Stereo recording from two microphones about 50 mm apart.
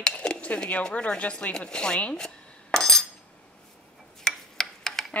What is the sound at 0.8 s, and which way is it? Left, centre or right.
Speech, centre.